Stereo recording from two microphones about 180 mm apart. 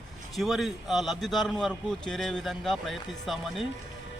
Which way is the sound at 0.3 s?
Centre (ahead or behind).